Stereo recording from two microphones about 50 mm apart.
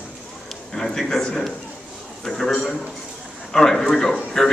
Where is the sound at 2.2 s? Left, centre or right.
Centre.